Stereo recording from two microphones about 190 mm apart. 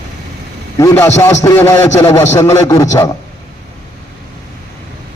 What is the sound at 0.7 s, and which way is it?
A man's voice, 15° left (ahead or behind).